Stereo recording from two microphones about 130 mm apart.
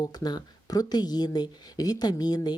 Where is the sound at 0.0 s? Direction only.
30° left (ahead or behind).